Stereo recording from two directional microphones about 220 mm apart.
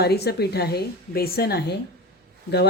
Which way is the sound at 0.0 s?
45° left (ahead or behind).